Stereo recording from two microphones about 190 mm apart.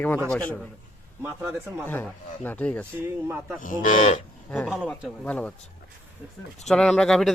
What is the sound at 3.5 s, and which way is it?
Speech, 45° left (ahead or behind).